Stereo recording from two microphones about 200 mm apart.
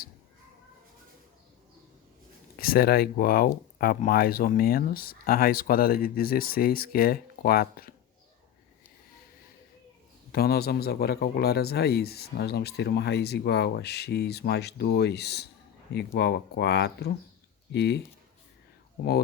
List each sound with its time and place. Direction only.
2.6 s speech: 50° left (ahead or behind)
10.3 s a man's voice: 50° left (ahead or behind)